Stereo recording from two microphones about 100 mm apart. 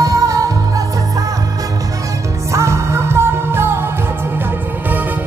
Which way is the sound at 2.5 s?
30° right (ahead or behind).